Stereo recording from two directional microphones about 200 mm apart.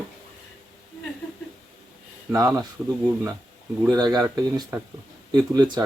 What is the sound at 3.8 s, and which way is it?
Speech, 20° right (ahead or behind).